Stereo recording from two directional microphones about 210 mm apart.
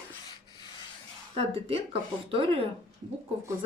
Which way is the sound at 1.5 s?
25° right (ahead or behind).